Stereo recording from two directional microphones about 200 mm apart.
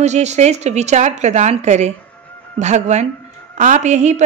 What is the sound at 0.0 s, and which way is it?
A woman's voice, 35° right (ahead or behind).